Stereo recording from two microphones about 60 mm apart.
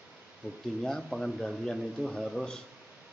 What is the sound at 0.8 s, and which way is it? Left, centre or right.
A man's voice, centre.